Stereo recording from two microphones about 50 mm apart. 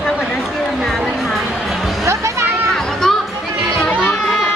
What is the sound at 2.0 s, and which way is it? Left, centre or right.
Music, right.